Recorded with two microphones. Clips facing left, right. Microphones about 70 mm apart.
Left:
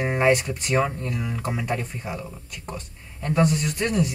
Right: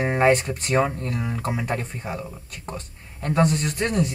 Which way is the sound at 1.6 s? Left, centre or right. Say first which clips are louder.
Even; right.